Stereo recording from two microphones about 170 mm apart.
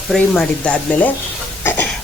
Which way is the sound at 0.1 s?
5° left (ahead or behind).